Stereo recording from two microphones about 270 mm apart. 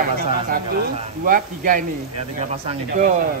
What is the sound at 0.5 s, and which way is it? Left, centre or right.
Speech, right.